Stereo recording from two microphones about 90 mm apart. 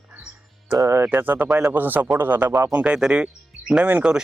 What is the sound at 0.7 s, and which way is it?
Speech, 35° right (ahead or behind).